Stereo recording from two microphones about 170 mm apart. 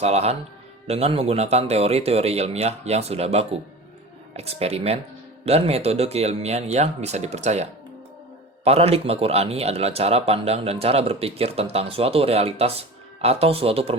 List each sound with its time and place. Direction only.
0.0 s a man's voice: 40° right (ahead or behind)